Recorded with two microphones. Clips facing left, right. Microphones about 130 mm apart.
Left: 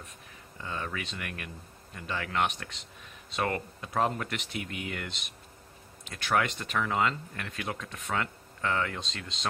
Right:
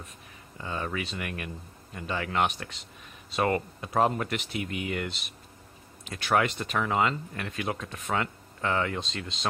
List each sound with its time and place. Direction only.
0.6 s speech: 25° right (ahead or behind)
0.9 s speech: 10° right (ahead or behind)
6.3 s speech: 5° right (ahead or behind)
7.6 s speech: 25° right (ahead or behind)
8.5 s speech: 15° right (ahead or behind)